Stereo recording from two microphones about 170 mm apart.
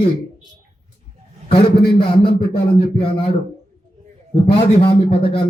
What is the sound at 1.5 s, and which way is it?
Speech, 30° left (ahead or behind).